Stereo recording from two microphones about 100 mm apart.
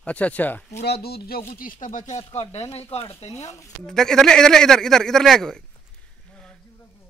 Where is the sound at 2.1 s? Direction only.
90° left.